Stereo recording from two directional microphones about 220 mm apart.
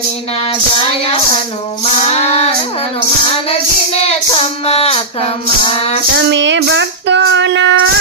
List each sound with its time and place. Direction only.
1.8 s child singing: 30° left (ahead or behind)
3.9 s child singing: 30° left (ahead or behind)
6.1 s child singing: 55° right (ahead or behind)